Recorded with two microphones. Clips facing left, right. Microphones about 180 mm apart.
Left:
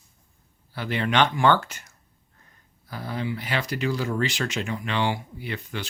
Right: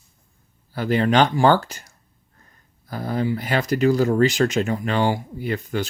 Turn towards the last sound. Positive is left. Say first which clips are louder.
# right 8 dB
turn(degrees=-45)  # may be behind; listen again after turning